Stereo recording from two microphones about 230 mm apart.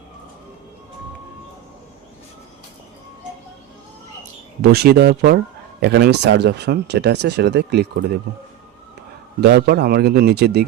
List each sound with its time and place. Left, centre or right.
4.6 s speech: right
9.4 s speech: right